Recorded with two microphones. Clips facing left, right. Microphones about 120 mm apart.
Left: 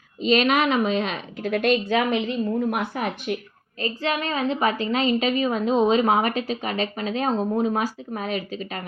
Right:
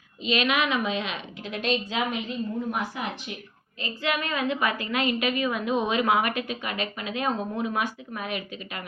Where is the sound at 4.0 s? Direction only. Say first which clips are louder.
Left 2 dB; 30° left (ahead or behind).